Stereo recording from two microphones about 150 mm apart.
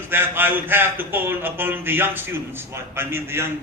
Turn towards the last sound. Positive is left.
turn(degrees=-15)  # may be behind; listen again after turning